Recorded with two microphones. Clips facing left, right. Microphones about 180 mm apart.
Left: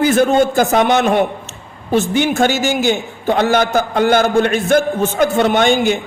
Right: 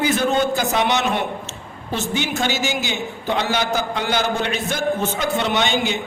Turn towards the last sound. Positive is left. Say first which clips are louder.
# left 7 dB
turn(degrees=50)  # may be behind; listen again after turning